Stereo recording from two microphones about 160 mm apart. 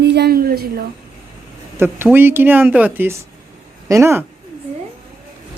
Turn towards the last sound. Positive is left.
turn(degrees=-15)  # may be behind; listen again after turning